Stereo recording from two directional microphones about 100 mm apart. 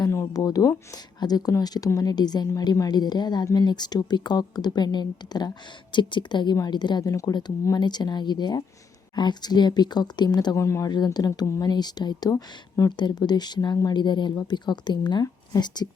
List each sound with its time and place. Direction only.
0.1 s a sound: 35° left (ahead or behind)
1.2 s speech: 40° left (ahead or behind)
7.1 s speech: 35° left (ahead or behind)
7.8 s speech: 45° left (ahead or behind)
10.8 s speech: 40° left (ahead or behind)
13.0 s speech: 45° left (ahead or behind)